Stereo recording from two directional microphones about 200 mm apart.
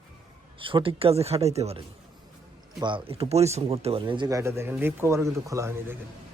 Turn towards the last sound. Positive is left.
turn(degrees=-15)  # may be behind; listen again after turning